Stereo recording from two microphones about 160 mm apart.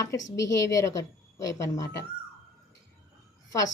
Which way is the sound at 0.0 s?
20° left (ahead or behind).